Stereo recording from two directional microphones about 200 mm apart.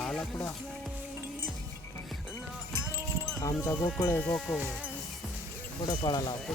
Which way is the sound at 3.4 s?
10° left (ahead or behind).